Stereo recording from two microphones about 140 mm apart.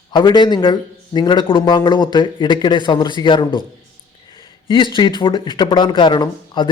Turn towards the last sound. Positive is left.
turn(degrees=35)  # may be behind; listen again after turning